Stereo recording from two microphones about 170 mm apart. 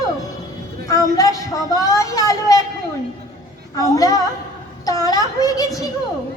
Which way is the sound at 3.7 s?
20° left (ahead or behind).